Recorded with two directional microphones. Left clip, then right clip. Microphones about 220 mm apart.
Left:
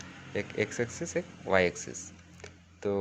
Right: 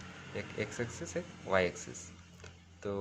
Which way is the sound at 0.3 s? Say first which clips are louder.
Left 7 dB; 25° left (ahead or behind).